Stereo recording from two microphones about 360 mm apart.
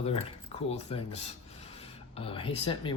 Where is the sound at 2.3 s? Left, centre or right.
Centre.